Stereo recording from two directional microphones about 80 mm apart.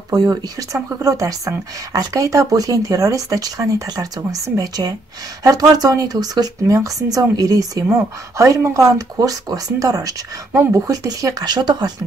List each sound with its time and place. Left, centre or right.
0.1 s speech: right
11.4 s speech: right